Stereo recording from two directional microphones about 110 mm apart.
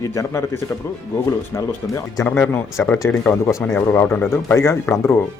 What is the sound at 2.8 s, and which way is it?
Speech, 15° left (ahead or behind).